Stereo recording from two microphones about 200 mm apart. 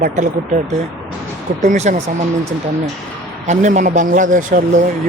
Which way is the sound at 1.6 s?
35° right (ahead or behind).